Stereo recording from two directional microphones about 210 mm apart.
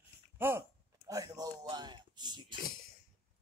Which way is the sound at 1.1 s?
15° right (ahead or behind).